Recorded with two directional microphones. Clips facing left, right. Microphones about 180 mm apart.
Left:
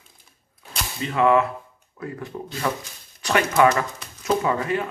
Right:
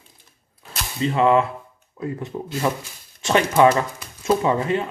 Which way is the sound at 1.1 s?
25° right (ahead or behind).